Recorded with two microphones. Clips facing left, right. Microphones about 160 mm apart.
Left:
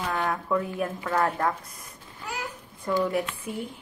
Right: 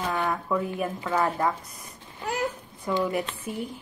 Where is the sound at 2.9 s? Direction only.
5° right (ahead or behind).